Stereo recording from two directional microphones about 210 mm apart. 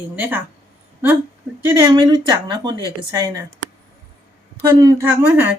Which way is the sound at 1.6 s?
15° right (ahead or behind).